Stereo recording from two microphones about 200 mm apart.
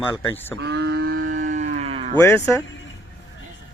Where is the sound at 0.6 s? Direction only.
55° right (ahead or behind); by 2.1 s 30° right (ahead or behind).